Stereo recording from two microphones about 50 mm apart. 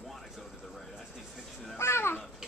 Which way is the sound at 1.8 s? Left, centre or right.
Left.